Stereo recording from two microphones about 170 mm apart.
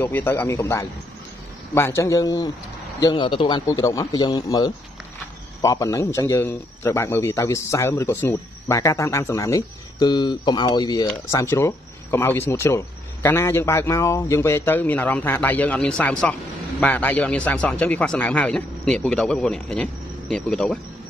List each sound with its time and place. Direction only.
0.0 s a man's voice: 15° left (ahead or behind)